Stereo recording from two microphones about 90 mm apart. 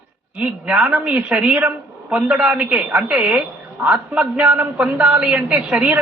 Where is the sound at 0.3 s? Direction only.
15° right (ahead or behind).